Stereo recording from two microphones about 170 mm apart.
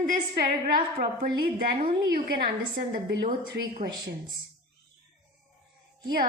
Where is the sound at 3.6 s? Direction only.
80° right.